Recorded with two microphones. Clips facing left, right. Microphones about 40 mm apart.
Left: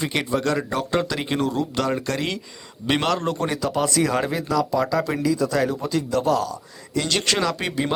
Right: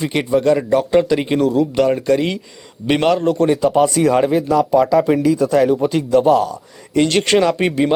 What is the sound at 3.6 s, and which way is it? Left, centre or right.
Speech, right.